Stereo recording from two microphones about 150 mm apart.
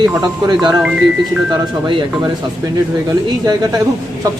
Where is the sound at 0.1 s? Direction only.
25° right (ahead or behind).